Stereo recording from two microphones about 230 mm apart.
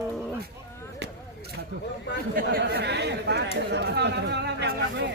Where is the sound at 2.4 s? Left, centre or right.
Right.